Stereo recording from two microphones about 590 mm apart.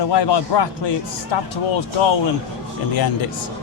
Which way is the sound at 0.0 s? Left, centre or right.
Left.